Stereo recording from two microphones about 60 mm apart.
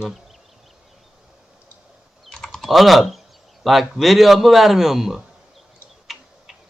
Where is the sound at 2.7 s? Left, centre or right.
Centre.